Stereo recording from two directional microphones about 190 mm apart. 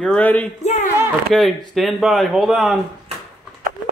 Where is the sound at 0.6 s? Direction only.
40° left (ahead or behind).